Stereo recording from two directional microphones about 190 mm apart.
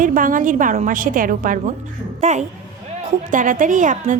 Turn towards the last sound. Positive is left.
turn(degrees=-40)  # may be behind; listen again after turning